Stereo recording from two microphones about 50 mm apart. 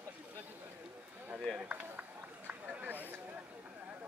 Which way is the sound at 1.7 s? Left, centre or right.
Right.